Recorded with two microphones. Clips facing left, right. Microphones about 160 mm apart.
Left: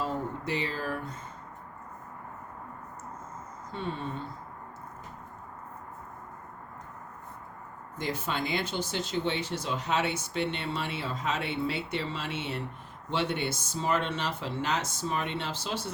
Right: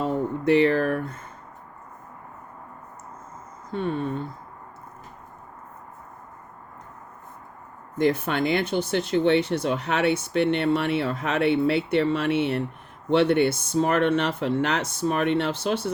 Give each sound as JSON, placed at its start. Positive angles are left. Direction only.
{"t": 0.0, "sound": "speech", "side_deg": -60}
{"t": 3.7, "sound": "a woman's voice", "side_deg": -55}
{"t": 7.9, "sound": "speech", "side_deg": -60}